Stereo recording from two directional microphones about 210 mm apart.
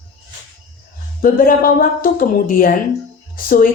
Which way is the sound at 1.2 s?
40° left (ahead or behind).